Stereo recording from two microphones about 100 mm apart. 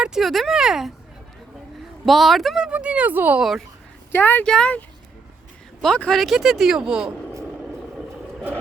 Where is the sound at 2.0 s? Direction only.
Centre (ahead or behind); by 3.4 s 15° right (ahead or behind).